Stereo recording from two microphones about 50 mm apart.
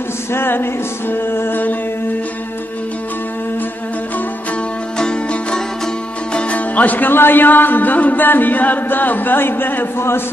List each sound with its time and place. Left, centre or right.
0.3 s music: left
4.9 s music: centre
6.3 s speech: left
9.9 s a man's voice: left